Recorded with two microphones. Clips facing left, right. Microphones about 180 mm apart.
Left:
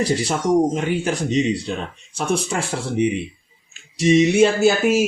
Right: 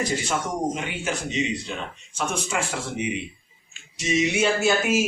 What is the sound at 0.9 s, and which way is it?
Speech, 35° left (ahead or behind).